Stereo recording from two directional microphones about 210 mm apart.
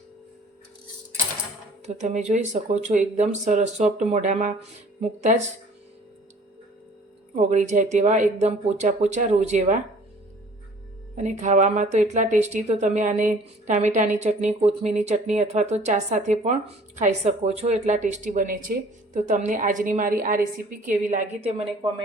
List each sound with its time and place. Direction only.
2.0 s speech: 35° right (ahead or behind)
7.3 s speech: 35° right (ahead or behind)
11.2 s speech: 35° right (ahead or behind)